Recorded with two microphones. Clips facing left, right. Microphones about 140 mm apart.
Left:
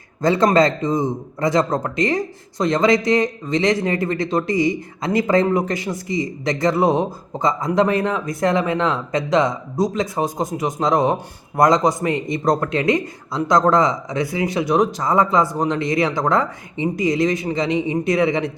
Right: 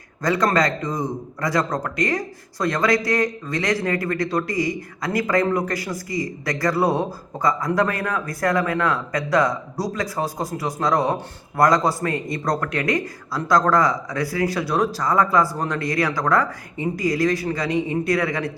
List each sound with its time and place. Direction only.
0.2 s a man's voice: 25° left (ahead or behind)